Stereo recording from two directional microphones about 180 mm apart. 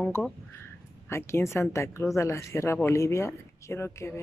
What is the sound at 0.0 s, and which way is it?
Speech, 5° left (ahead or behind).